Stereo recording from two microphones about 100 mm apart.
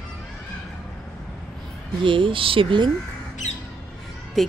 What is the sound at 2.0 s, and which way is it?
Speech, 60° right (ahead or behind).